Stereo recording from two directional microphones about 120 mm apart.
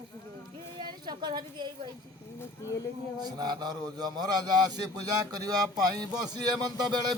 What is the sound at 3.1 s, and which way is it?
Speech, 35° right (ahead or behind).